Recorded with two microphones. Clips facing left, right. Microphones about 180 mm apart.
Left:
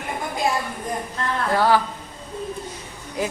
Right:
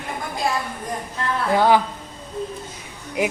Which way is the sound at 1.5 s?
20° right (ahead or behind).